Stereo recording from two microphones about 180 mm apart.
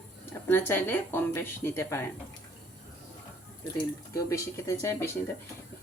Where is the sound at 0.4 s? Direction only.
10° left (ahead or behind).